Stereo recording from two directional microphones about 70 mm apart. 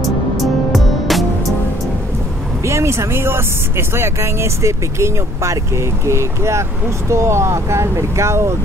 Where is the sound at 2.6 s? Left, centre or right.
Right.